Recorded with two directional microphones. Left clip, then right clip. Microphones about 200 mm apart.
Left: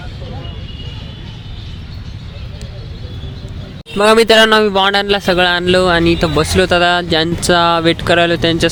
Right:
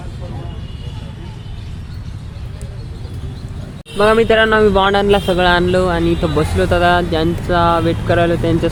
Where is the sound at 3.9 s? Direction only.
40° left (ahead or behind).